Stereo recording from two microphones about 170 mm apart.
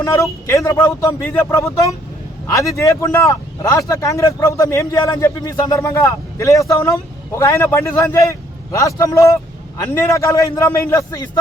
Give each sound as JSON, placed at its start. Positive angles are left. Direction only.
{"t": 0.0, "sound": "a man's voice", "side_deg": 20}